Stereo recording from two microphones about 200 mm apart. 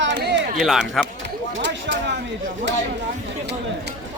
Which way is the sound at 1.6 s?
60° right (ahead or behind).